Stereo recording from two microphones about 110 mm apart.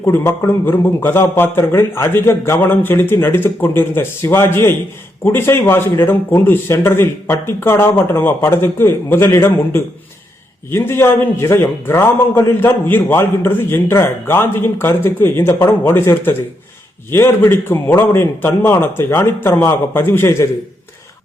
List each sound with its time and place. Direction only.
0.0 s a man's voice: 25° left (ahead or behind)